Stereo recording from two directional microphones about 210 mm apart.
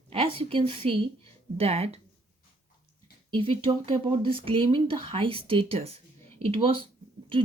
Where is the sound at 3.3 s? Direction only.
25° right (ahead or behind).